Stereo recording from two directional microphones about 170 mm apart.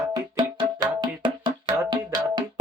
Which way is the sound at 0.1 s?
30° right (ahead or behind).